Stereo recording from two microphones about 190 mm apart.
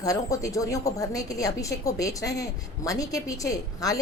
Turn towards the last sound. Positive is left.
turn(degrees=20)  # may be behind; listen again after turning